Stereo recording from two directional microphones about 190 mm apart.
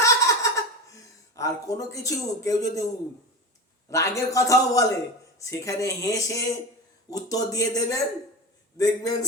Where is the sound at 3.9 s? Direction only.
15° left (ahead or behind).